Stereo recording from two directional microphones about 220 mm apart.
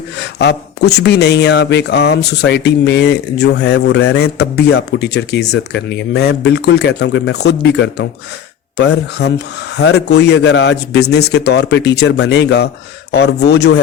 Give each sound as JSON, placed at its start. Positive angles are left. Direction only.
{"t": 0.2, "sound": "speech", "side_deg": 50}